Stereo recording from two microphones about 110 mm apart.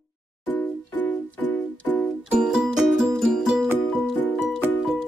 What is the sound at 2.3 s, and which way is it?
Music, 5° right (ahead or behind).